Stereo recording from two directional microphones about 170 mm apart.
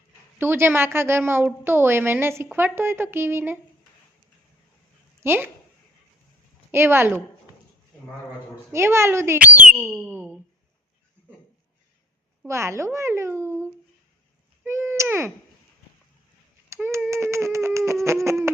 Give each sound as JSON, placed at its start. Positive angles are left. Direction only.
{"t": 0.3, "sound": "a woman's voice", "side_deg": -15}
{"t": 5.2, "sound": "speech", "side_deg": -15}
{"t": 6.7, "sound": "a woman's voice", "side_deg": -15}
{"t": 8.7, "sound": "a woman's voice", "side_deg": -15}
{"t": 12.5, "sound": "a woman's voice", "side_deg": -15}
{"t": 14.6, "sound": "a sound", "side_deg": -15}
{"t": 16.6, "sound": "a sound", "side_deg": -15}